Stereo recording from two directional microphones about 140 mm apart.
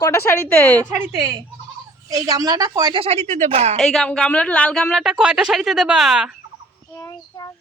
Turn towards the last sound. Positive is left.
turn(degrees=25)  # may be behind; listen again after turning